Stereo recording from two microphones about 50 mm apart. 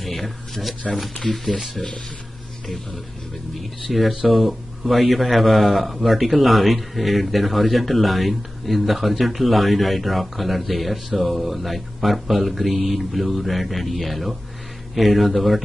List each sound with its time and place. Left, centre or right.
0.0 s a sound: centre
1.1 s speech: centre
3.5 s speech: centre